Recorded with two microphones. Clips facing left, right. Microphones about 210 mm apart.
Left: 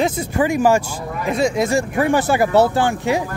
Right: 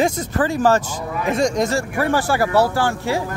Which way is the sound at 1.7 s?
15° left (ahead or behind).